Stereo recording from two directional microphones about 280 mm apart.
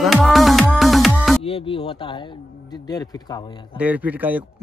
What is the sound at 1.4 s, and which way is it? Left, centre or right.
Speech, centre.